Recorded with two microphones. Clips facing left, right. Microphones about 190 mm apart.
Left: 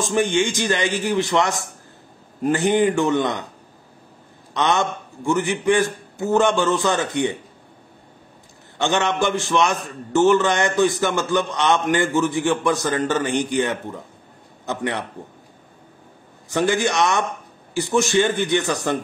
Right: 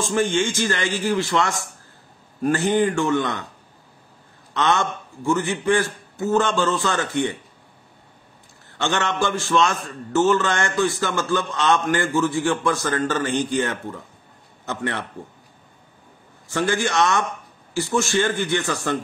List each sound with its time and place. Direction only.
0.0 s a man's voice: 20° left (ahead or behind)
4.6 s a man's voice: 20° left (ahead or behind)
8.7 s a man's voice: 15° left (ahead or behind)
16.4 s a man's voice: 20° left (ahead or behind)